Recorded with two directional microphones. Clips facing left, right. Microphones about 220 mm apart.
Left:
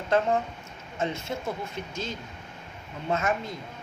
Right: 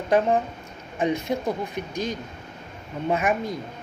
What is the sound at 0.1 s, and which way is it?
Speech, 15° right (ahead or behind).